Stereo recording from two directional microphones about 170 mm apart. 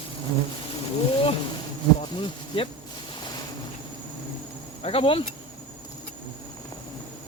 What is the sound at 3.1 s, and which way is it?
Vehicle, 25° left (ahead or behind).